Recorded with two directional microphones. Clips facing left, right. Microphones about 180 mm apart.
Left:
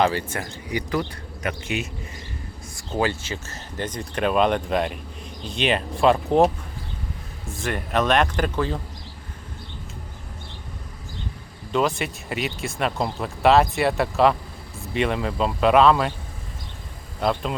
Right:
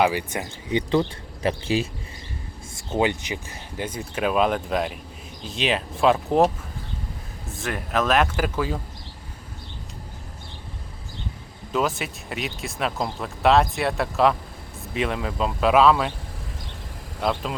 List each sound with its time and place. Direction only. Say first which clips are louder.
0.0 s speech: even; 15° right (ahead or behind); by 1.9 s 30° right (ahead or behind)
2.7 s speech: right 1 dB; 20° right (ahead or behind)
11.7 s speech: left 2 dB; centre (ahead or behind)
17.2 s speech: left 2 dB; centre (ahead or behind)